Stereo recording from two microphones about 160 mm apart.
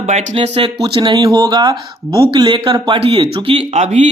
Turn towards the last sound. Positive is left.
turn(degrees=-45)  # may be behind; listen again after turning